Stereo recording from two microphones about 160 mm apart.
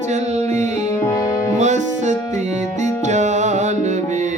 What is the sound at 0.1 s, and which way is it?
Music, 45° right (ahead or behind).